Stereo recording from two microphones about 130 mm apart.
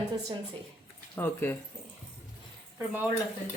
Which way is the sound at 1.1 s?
15° left (ahead or behind).